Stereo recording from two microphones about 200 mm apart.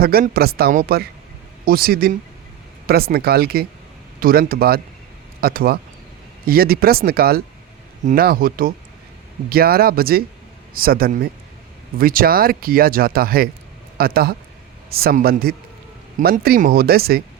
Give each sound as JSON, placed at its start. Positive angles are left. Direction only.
{"t": 0.0, "sound": "speech", "side_deg": -50}